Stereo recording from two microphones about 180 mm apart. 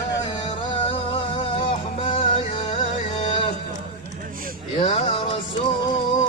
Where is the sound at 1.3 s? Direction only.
30° left (ahead or behind).